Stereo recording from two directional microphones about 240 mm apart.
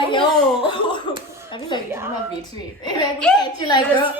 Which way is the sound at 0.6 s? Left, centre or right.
Centre.